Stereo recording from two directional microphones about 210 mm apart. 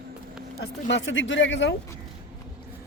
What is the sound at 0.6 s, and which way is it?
Speech, 55° left (ahead or behind).